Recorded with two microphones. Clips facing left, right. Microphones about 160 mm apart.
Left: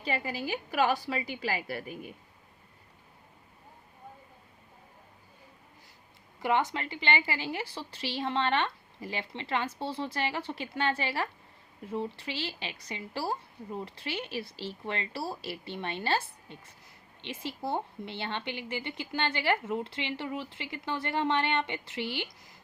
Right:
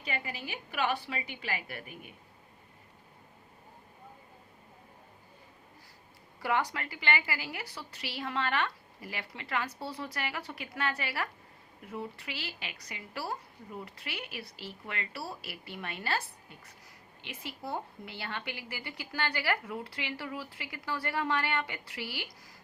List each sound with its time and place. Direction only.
0.0 s a woman's voice: 35° left (ahead or behind)
6.4 s a woman's voice: 20° left (ahead or behind)